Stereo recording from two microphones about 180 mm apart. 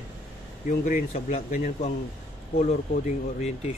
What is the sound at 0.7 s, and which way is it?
Speech, 45° left (ahead or behind).